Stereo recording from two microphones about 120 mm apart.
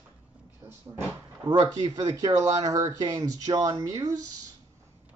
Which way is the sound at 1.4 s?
35° right (ahead or behind).